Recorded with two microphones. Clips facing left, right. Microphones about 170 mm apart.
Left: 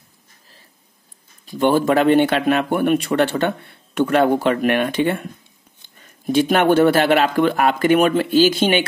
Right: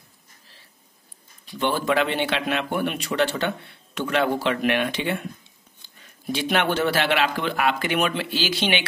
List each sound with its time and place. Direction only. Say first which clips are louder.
1.4 s speech: left 8 dB; 45° left (ahead or behind)